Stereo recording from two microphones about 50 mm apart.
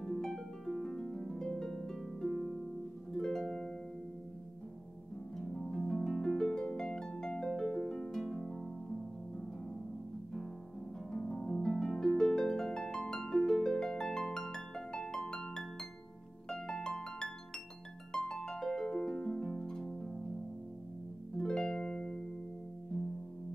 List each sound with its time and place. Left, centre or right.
0.0 s harp: centre
5.5 s harp: centre
11.1 s harp: centre
21.4 s harp: centre